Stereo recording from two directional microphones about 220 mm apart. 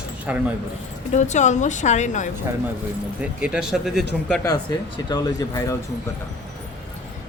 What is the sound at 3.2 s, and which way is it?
Speech, 5° right (ahead or behind).